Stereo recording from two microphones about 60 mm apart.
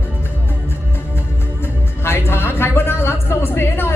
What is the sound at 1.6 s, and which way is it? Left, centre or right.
Music, left.